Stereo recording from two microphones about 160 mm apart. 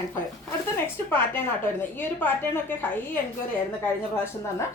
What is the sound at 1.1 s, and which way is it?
A woman's voice, 15° left (ahead or behind).